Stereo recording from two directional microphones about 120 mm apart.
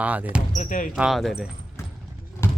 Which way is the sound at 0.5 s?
90° left.